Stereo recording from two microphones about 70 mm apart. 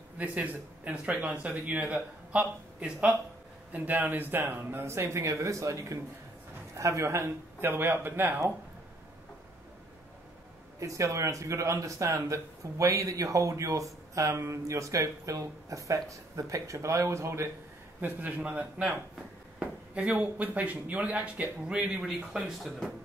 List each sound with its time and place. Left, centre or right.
0.2 s speech: right
10.8 s speech: right
18.0 s speech: right; by 22.8 s centre